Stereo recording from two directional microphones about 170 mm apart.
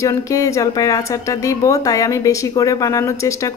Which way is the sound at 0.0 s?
20° left (ahead or behind).